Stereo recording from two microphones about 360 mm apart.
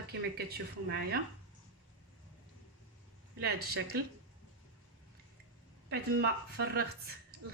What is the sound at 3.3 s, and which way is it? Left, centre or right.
Speech, right.